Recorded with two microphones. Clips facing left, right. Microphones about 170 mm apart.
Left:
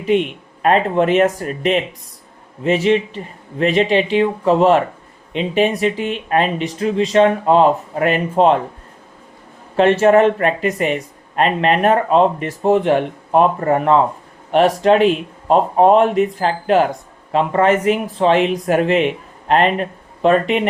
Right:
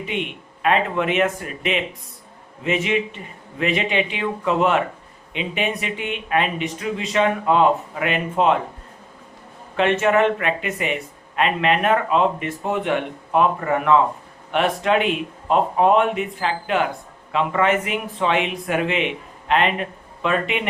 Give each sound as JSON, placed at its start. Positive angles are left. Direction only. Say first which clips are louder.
{"t": 0.1, "sound": "speech", "louder": "left 13 dB", "side_deg": 40}
{"t": 9.7, "sound": "speech", "louder": "left 6 dB", "side_deg": 35}